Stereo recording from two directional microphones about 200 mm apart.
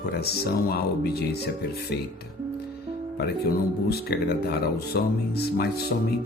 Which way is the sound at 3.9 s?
50° left (ahead or behind).